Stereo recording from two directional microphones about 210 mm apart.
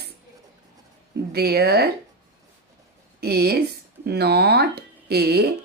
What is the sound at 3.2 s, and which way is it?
A woman's voice, 50° right (ahead or behind).